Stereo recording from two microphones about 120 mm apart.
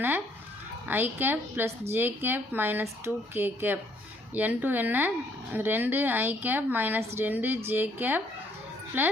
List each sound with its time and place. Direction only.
0.9 s a woman's voice: 15° right (ahead or behind)